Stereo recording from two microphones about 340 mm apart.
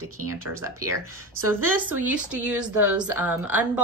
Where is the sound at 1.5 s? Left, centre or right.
Centre.